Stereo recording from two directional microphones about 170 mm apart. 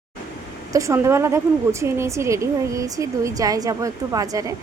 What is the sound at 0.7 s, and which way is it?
A woman's voice, 15° right (ahead or behind).